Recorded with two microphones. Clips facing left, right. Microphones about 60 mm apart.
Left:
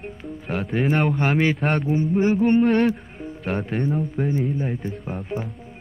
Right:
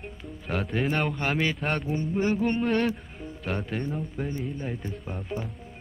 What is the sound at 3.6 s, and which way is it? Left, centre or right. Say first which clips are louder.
Mantra: left 7 dB; left.